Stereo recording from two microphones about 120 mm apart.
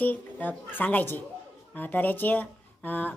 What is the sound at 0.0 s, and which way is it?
A woman's voice, 15° left (ahead or behind).